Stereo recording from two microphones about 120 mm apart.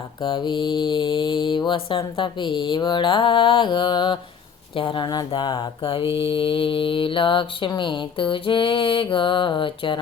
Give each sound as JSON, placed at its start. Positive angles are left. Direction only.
{"t": 0.2, "sound": "mantra", "side_deg": 40}